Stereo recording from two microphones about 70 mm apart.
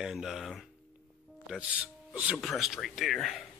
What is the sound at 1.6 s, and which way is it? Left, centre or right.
Speech, centre.